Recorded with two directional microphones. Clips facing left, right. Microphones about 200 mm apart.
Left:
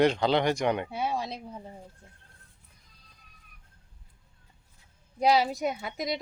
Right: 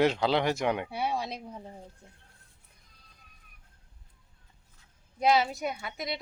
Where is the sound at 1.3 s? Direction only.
5° left (ahead or behind).